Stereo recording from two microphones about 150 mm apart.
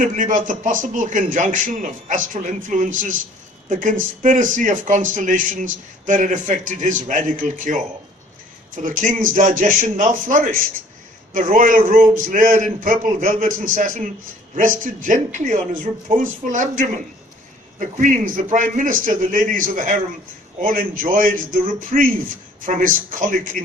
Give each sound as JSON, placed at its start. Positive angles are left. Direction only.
{"t": 0.0, "sound": "a man's voice", "side_deg": -60}